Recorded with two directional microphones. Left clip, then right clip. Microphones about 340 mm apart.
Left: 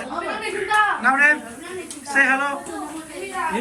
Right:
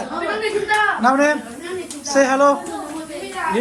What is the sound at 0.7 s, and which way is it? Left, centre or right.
A man's voice, centre.